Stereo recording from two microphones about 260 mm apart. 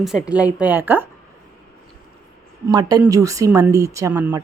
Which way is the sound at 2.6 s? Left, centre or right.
Centre.